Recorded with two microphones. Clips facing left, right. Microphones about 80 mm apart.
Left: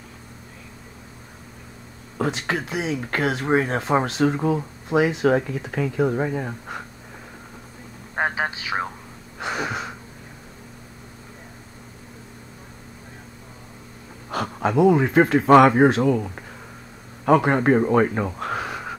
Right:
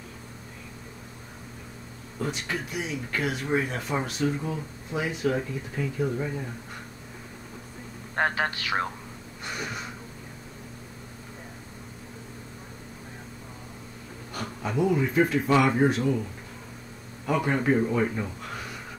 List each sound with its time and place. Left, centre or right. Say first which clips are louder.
2.1 s speech: left 6 dB; left
3.0 s speech: left 6 dB; left
3.4 s speech: left 7 dB; left
3.9 s speech: left 8 dB; left
4.8 s speech: left 9 dB; left
8.2 s a man's voice: left 2 dB; centre
9.4 s a sound: left 8 dB; left
14.3 s speech: left 9 dB; left
15.7 s speech: left 6 dB; left
17.2 s speech: left 9 dB; left
17.6 s speech: left 6 dB; left